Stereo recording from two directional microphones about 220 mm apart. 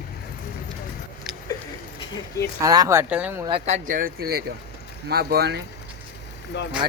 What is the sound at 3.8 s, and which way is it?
Speech, 40° right (ahead or behind).